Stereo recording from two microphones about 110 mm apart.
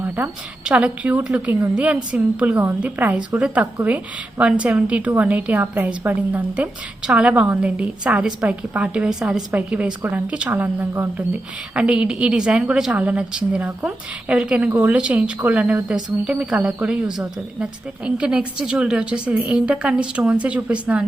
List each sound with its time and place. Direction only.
0.2 s speech: 15° right (ahead or behind)